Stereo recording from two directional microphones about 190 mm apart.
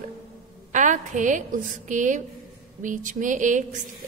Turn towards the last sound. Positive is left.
turn(degrees=-40)  # may be behind; listen again after turning